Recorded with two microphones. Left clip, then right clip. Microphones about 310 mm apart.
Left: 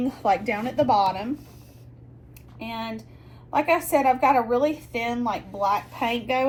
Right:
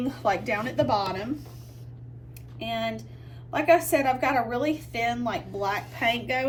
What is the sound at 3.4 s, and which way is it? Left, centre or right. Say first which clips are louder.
A woman's voice: right 1 dB; centre.